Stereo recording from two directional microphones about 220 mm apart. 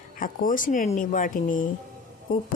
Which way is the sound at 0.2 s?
40° left (ahead or behind).